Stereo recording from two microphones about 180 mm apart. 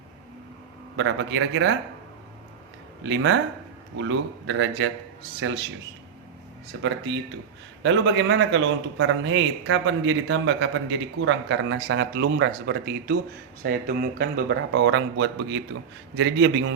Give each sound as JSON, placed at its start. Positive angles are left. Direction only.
{"t": 0.9, "sound": "speech", "side_deg": -90}
{"t": 3.0, "sound": "speech", "side_deg": -90}
{"t": 4.4, "sound": "speech", "side_deg": -90}
{"t": 6.8, "sound": "a man's voice", "side_deg": -85}